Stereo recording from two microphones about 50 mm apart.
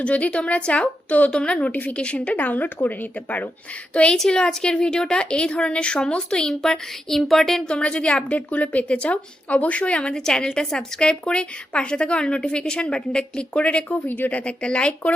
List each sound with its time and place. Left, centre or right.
0.0 s a woman's voice: left
1.3 s a woman's voice: centre
1.7 s speech: left
3.9 s a woman's voice: left
6.6 s a sound: centre
7.7 s a woman's voice: centre